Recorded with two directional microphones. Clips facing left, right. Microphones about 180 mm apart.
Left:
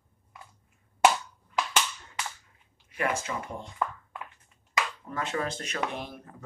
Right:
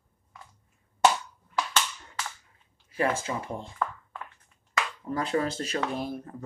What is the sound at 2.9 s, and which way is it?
Speech, 30° right (ahead or behind).